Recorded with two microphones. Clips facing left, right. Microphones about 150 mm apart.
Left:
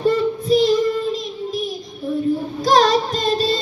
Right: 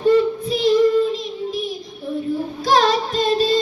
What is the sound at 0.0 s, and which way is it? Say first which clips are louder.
Child singing: right 3 dB; 40° left (ahead or behind).